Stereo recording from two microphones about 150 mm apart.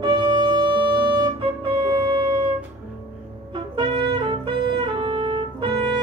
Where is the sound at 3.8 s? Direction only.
30° right (ahead or behind).